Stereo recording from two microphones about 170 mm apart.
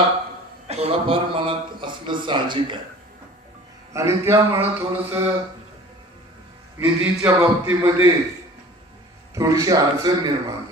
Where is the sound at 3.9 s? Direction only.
15° right (ahead or behind).